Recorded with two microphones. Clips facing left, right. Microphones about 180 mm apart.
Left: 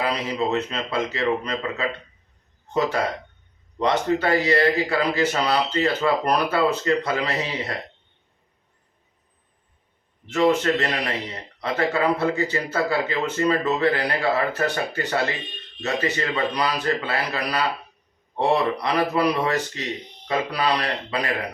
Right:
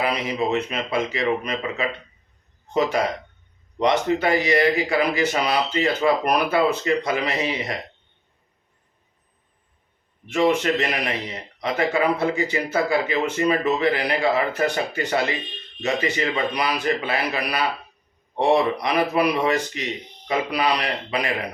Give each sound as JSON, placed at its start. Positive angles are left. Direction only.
{"t": 0.0, "sound": "speech", "side_deg": -15}
{"t": 10.2, "sound": "speech", "side_deg": -15}